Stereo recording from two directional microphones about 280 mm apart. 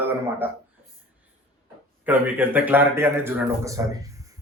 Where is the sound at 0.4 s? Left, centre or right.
Centre.